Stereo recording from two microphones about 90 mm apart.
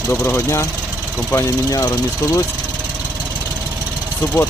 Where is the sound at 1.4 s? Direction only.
45° left (ahead or behind).